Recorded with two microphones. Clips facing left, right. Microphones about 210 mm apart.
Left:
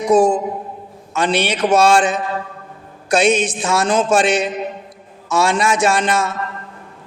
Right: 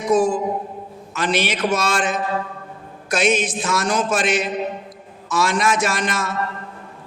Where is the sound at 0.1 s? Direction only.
30° left (ahead or behind).